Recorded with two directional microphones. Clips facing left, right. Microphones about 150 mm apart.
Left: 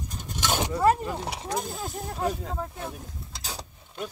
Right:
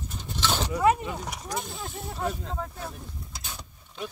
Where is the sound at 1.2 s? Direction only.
30° left (ahead or behind).